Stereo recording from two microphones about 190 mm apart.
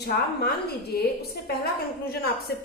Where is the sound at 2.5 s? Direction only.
55° left (ahead or behind).